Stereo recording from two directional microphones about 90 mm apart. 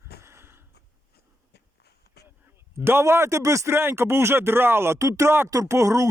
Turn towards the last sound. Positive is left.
turn(degrees=-35)  # may be behind; listen again after turning